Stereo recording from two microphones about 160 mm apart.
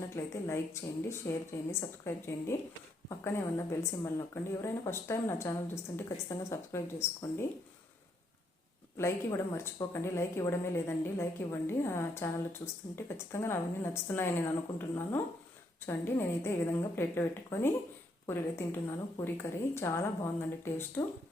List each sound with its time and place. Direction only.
0.2 s speech: 15° left (ahead or behind)
9.0 s speech: 15° left (ahead or behind)